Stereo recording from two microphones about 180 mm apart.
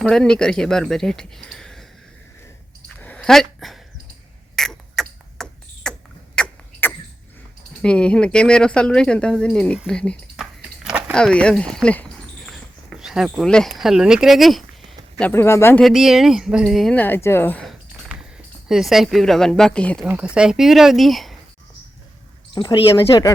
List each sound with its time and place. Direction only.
0.0 s speech: 5° left (ahead or behind)
3.0 s a sound: 5° left (ahead or behind)
6.3 s rodents: 10° left (ahead or behind)
7.8 s speech: 5° left (ahead or behind)
15.2 s speech: 15° left (ahead or behind)
15.8 s speech: centre (ahead or behind)
20.1 s speech: 5° right (ahead or behind)
22.5 s speech: 25° left (ahead or behind)